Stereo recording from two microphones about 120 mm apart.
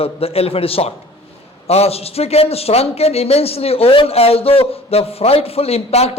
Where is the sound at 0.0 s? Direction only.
55° left (ahead or behind).